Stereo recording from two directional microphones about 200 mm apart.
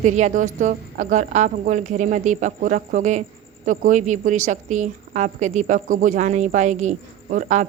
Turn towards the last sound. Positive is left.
turn(degrees=-40)  # may be behind; listen again after turning